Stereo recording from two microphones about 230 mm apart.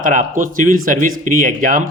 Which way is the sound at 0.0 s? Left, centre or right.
Right.